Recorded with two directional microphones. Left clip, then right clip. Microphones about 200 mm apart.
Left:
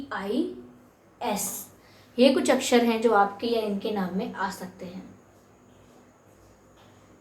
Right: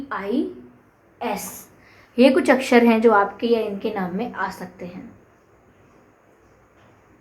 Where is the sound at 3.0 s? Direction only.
45° right (ahead or behind).